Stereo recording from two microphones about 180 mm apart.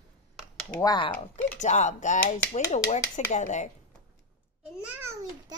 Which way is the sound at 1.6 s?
40° left (ahead or behind).